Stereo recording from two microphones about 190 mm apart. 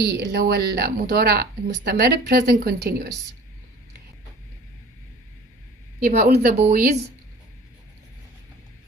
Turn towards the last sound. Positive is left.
turn(degrees=-50)  # may be behind; listen again after turning